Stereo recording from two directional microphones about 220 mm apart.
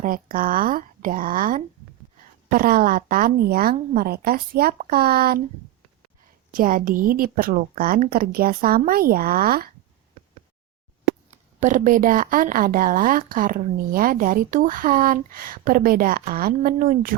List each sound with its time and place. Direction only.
0.0 s a woman's voice: 40° right (ahead or behind)
6.5 s a woman's voice: 40° right (ahead or behind)
11.3 s a woman's voice: 35° right (ahead or behind)